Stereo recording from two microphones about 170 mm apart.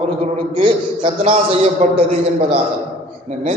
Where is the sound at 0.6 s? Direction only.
30° right (ahead or behind).